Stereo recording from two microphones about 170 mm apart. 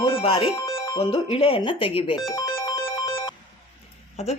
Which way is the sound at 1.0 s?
35° left (ahead or behind).